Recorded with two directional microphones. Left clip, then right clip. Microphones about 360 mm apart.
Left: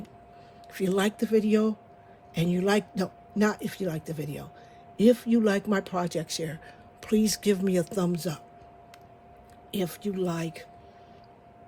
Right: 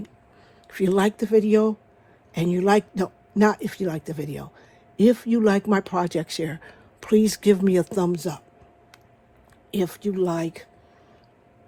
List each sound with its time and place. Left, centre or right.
0.7 s speech: centre
9.7 s speech: centre